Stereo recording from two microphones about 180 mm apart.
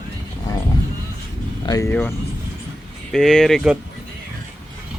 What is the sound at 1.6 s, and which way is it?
Speech, 20° left (ahead or behind).